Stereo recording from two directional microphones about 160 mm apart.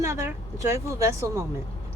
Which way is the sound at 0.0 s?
20° right (ahead or behind).